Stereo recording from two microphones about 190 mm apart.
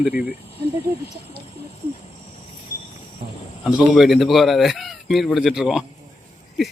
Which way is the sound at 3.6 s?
Centre (ahead or behind).